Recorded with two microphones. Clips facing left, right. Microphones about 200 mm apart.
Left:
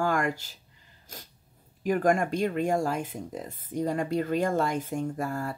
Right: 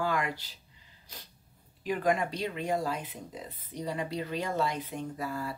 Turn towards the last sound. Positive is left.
turn(degrees=50)  # may be behind; listen again after turning